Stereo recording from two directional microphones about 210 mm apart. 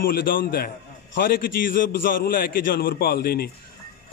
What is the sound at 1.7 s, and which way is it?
A man's voice, 45° left (ahead or behind).